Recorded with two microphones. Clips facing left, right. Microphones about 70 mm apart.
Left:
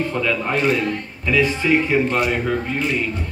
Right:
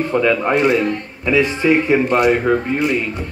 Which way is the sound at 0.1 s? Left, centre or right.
Right.